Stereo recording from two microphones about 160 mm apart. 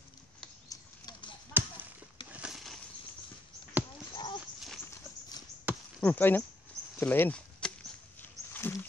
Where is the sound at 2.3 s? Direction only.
5° right (ahead or behind).